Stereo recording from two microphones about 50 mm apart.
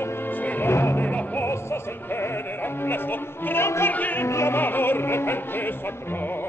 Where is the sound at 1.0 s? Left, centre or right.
Left.